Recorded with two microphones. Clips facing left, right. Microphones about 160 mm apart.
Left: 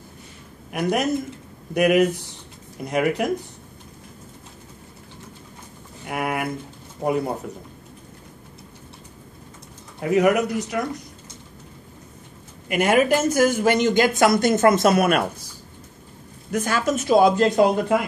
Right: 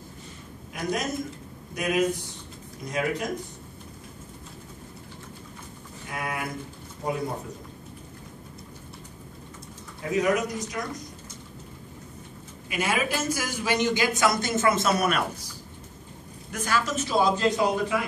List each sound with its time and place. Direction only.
0.7 s speech: 65° left (ahead or behind)
6.0 s speech: 65° left (ahead or behind)
9.9 s speech: 65° left (ahead or behind)
12.6 s a man's voice: 60° left (ahead or behind)
16.5 s a man's voice: 50° left (ahead or behind)